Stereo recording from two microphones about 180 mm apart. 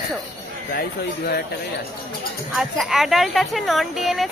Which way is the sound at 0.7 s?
60° left (ahead or behind).